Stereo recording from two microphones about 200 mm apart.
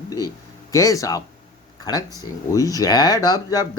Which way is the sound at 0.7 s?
15° left (ahead or behind).